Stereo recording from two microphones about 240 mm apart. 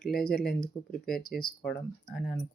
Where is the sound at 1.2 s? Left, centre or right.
Left.